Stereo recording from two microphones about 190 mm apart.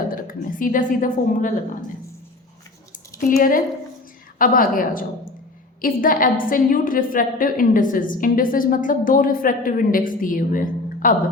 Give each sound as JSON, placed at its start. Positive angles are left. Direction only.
{"t": 0.1, "sound": "a woman's voice", "side_deg": 45}
{"t": 3.2, "sound": "a woman's voice", "side_deg": 45}